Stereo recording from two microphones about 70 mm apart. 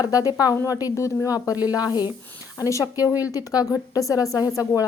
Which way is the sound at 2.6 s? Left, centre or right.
Left.